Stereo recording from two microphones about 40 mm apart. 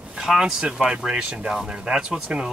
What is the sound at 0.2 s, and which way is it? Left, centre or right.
Speech, centre.